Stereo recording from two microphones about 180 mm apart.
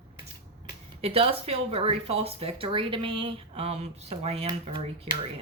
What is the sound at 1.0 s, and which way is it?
A woman's voice, 30° right (ahead or behind).